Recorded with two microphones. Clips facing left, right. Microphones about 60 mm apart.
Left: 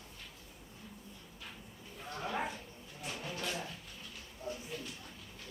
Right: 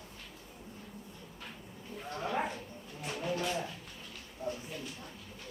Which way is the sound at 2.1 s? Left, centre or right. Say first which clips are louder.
Right 3 dB; centre.